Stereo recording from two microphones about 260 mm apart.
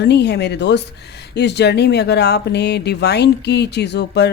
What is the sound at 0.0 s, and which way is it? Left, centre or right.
Speech, left.